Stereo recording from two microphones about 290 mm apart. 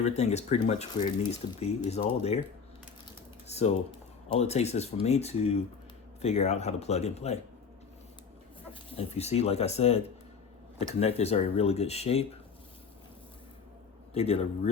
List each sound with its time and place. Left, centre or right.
0.0 s speech: left
3.4 s speech: left
8.9 s speech: left
14.1 s speech: left